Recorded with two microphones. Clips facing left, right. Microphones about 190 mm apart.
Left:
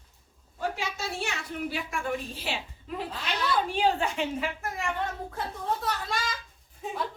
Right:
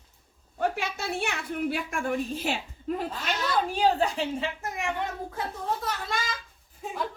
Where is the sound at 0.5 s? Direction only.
60° right (ahead or behind); by 4.5 s 35° right (ahead or behind).